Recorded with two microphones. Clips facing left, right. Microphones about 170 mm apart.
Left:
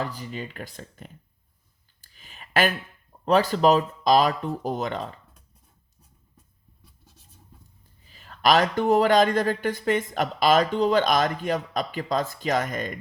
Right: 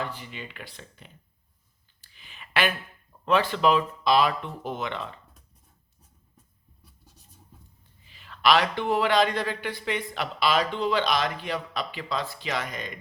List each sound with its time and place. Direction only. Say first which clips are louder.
0.0 s speech: left 3 dB; 40° left (ahead or behind)
2.0 s a sound: left 1 dB; 40° left (ahead or behind)
3.2 s speech: left 3 dB; 40° left (ahead or behind)
8.0 s speech: left 1 dB; 40° left (ahead or behind)